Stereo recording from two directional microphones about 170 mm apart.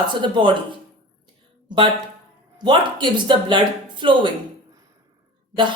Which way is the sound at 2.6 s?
30° right (ahead or behind).